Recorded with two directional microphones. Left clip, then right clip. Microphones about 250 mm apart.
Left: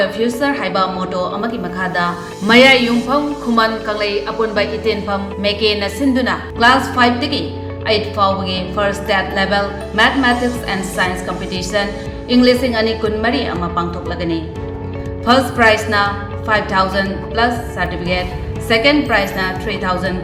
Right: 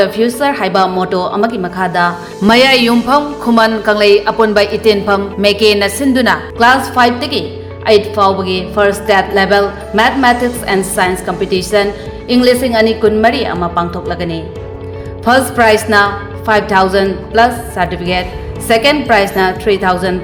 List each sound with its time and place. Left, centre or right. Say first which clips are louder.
0.0 s a woman's voice: right 5 dB; right